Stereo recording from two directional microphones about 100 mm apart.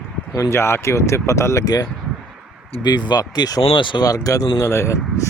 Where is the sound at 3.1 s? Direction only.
45° left (ahead or behind).